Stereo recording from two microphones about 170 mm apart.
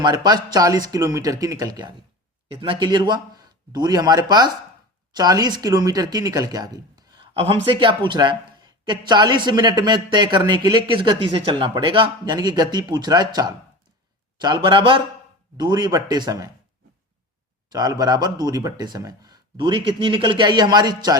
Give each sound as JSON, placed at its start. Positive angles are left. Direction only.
{"t": 0.0, "sound": "speech", "side_deg": -25}
{"t": 7.2, "sound": "a man's voice", "side_deg": -35}
{"t": 17.7, "sound": "speech", "side_deg": -20}